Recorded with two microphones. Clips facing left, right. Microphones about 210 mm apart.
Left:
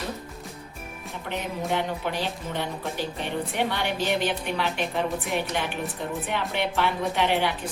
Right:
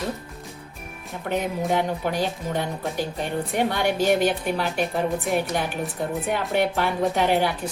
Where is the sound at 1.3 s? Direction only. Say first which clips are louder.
Right 5 dB; 45° right (ahead or behind).